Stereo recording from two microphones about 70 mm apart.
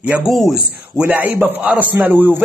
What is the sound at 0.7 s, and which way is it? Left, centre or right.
Speech, right.